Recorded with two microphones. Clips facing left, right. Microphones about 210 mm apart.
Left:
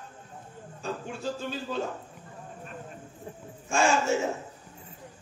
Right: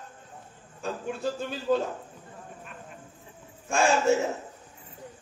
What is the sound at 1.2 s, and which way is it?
Speech, 55° right (ahead or behind).